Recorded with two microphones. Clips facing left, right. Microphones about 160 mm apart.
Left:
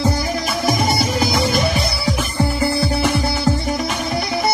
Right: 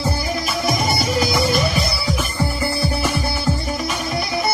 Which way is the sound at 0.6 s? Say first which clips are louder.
Left 3 dB; 50° left (ahead or behind).